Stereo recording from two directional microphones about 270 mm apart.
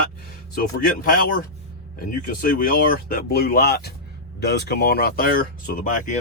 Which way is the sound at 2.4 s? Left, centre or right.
Left.